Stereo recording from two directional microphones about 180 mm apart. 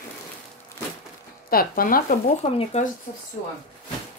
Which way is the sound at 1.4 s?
55° left (ahead or behind).